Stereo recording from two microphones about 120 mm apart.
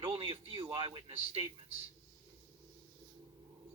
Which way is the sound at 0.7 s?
40° right (ahead or behind).